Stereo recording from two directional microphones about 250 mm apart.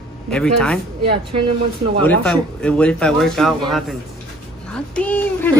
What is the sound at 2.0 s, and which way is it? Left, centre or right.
Speech, centre.